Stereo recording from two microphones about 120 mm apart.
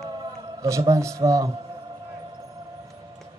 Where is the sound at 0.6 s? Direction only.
25° right (ahead or behind).